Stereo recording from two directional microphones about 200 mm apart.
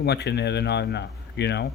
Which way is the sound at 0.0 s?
55° left (ahead or behind).